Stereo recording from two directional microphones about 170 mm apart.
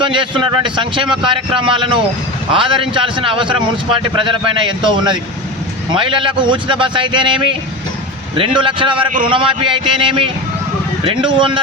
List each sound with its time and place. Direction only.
0.0 s a man's voice: 30° right (ahead or behind)